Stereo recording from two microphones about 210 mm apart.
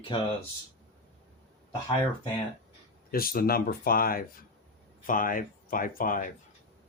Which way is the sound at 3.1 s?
45° left (ahead or behind).